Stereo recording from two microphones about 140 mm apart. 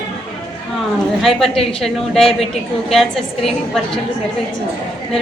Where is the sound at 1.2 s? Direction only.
Centre (ahead or behind).